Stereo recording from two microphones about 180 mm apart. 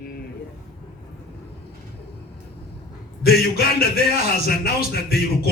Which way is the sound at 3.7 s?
60° left (ahead or behind).